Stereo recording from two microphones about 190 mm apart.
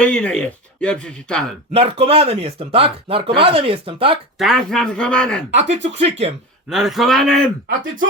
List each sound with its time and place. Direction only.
0.0 s speech: 5° left (ahead or behind)
1.7 s speech: 30° right (ahead or behind)
4.4 s speech: centre (ahead or behind)
5.5 s speech: 70° right (ahead or behind)
6.0 s speech: 35° right (ahead or behind)
6.7 s speech: centre (ahead or behind)